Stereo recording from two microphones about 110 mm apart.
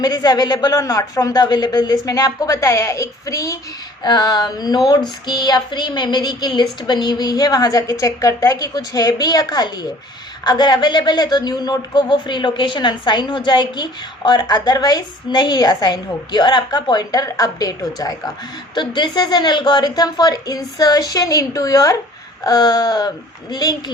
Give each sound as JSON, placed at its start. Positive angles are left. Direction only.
{"t": 0.0, "sound": "a woman's voice", "side_deg": 35}